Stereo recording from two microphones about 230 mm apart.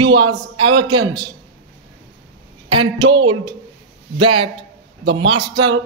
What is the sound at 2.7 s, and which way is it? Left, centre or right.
A man's voice, right.